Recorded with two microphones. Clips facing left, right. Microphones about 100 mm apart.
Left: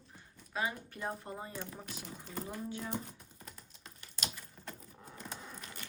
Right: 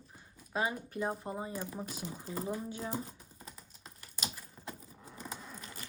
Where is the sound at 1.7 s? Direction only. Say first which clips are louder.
Right 5 dB; 5° right (ahead or behind).